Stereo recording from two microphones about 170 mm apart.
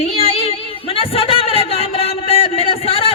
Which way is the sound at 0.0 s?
35° left (ahead or behind).